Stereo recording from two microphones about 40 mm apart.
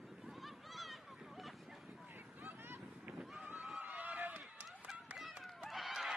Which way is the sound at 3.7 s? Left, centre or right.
Right.